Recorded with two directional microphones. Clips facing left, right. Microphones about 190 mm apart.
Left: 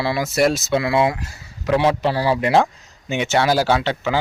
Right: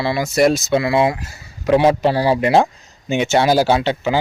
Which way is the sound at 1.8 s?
15° right (ahead or behind).